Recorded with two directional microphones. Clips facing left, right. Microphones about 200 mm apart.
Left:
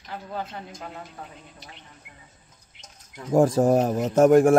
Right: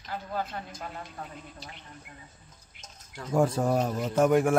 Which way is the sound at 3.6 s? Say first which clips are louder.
Left 7 dB; 50° left (ahead or behind).